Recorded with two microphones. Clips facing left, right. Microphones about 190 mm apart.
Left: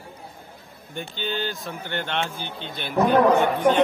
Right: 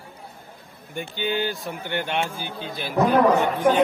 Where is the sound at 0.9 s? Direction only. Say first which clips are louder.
Right 3 dB; 10° right (ahead or behind).